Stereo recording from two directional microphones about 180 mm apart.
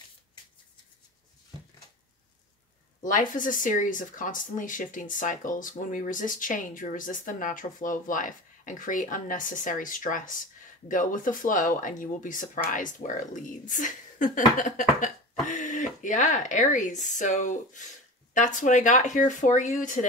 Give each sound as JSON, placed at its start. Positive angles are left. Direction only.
{"t": 3.0, "sound": "speech", "side_deg": 45}